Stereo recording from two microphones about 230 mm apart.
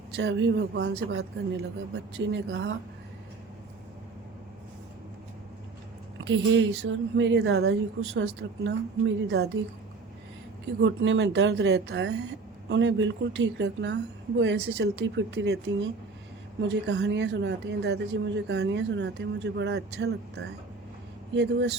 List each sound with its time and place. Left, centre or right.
0.2 s a woman's voice: right
6.1 s a woman's voice: right
10.8 s a woman's voice: right
16.6 s a woman's voice: right